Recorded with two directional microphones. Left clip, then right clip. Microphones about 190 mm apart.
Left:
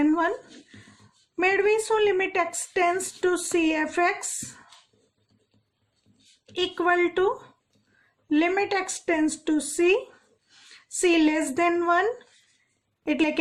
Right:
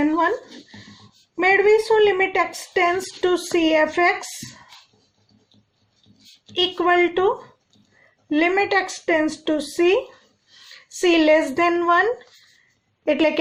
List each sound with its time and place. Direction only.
1.4 s a woman's voice: 50° left (ahead or behind)
6.5 s a woman's voice: 50° left (ahead or behind)
8.3 s a woman's voice: 50° left (ahead or behind)
11.0 s a woman's voice: 50° left (ahead or behind)
13.1 s a woman's voice: 45° left (ahead or behind)